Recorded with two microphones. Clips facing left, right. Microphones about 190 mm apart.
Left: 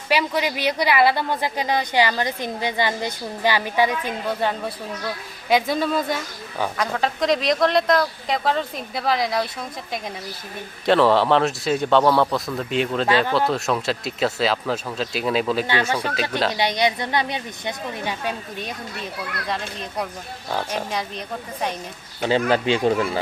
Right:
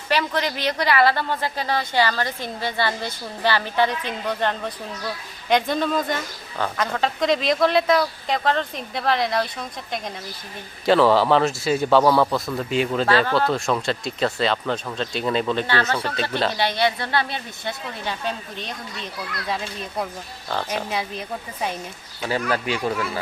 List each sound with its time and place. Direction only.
0.1 s a woman's voice: 10° left (ahead or behind)
19.5 s a man's voice: 5° right (ahead or behind)
22.2 s speech: 30° left (ahead or behind)